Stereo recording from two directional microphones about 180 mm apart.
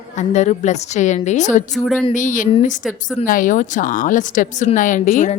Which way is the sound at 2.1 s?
45° left (ahead or behind).